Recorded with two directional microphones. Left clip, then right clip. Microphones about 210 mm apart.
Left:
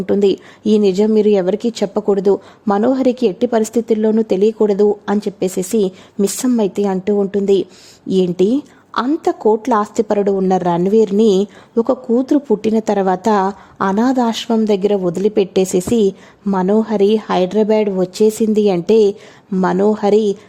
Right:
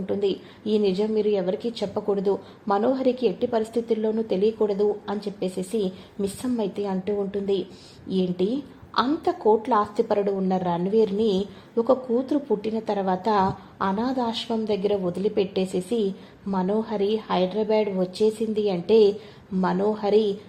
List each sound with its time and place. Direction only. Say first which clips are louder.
0.0 s a woman's voice: left 11 dB; 50° left (ahead or behind)